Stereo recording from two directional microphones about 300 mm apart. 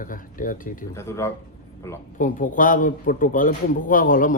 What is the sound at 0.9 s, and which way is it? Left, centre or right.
Speech, centre.